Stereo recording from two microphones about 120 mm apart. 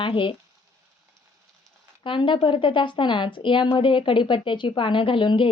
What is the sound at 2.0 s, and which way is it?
A woman's voice, 45° left (ahead or behind).